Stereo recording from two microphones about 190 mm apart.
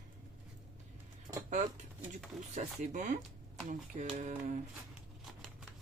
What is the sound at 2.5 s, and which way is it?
Speech, 40° right (ahead or behind).